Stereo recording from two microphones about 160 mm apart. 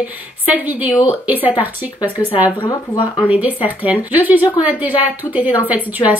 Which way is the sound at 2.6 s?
30° left (ahead or behind).